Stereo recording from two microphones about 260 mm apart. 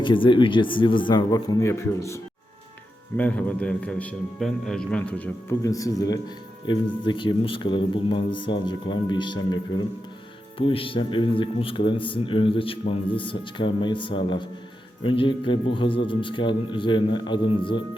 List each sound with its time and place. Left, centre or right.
0.0 s a man's voice: centre